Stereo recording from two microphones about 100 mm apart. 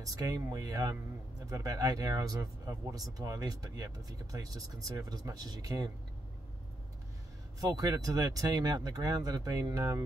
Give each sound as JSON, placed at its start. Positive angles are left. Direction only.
{"t": 0.0, "sound": "speech", "side_deg": -35}
{"t": 7.6, "sound": "speech", "side_deg": -40}